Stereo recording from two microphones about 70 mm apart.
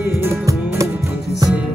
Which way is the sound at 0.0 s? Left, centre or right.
Right.